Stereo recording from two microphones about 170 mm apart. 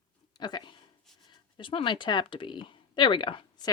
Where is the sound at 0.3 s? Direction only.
25° left (ahead or behind).